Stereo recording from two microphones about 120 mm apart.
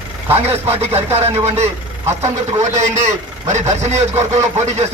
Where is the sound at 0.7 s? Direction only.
60° right (ahead or behind).